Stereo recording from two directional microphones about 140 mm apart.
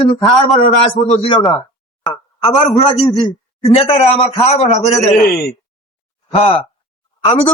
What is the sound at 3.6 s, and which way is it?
A man's voice, 45° left (ahead or behind).